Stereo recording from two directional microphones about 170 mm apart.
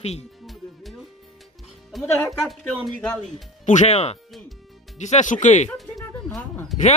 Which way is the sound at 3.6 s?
45° left (ahead or behind).